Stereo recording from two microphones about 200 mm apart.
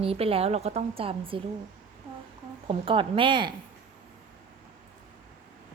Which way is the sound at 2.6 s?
25° right (ahead or behind).